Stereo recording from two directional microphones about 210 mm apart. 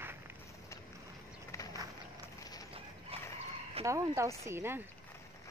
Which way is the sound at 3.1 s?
25° right (ahead or behind).